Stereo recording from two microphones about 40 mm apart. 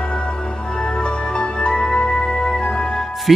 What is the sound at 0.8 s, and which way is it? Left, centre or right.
Music, left.